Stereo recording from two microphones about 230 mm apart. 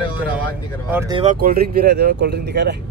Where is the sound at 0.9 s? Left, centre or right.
Centre.